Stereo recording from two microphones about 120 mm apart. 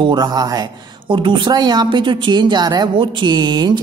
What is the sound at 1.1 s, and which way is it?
A woman's voice, 45° right (ahead or behind).